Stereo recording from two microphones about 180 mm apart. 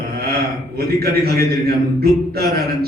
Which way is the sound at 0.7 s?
60° right (ahead or behind).